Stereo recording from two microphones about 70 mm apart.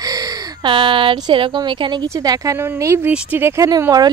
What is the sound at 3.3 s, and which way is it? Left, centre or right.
Speech, right.